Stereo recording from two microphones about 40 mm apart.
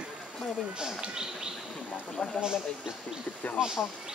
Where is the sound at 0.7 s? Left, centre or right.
Right.